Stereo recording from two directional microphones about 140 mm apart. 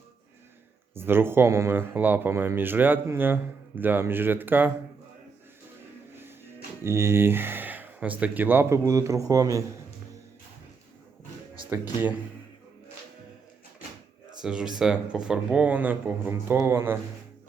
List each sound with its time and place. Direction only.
0.9 s speech: 15° right (ahead or behind)
6.1 s music: 15° right (ahead or behind)
6.8 s speech: 20° right (ahead or behind)
11.9 s speech: 10° right (ahead or behind)
14.4 s speech: 5° right (ahead or behind)